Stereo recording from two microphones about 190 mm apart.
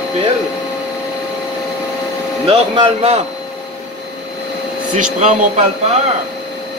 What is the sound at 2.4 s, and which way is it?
Speech, 30° right (ahead or behind).